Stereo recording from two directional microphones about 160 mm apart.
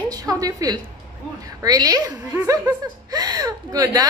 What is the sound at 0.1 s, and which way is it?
A woman's voice, 25° right (ahead or behind).